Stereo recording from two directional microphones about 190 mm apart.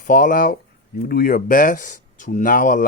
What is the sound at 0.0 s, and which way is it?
Speech, 45° left (ahead or behind).